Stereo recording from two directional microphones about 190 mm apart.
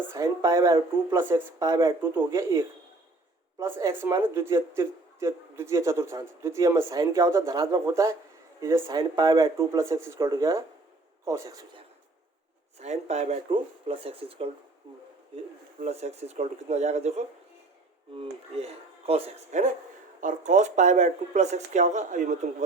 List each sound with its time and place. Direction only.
0.1 s speech: 15° right (ahead or behind)
12.8 s speech: 35° right (ahead or behind)
15.8 s speech: 35° right (ahead or behind)